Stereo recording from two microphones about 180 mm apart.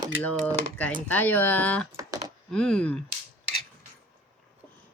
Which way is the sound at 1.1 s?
10° left (ahead or behind).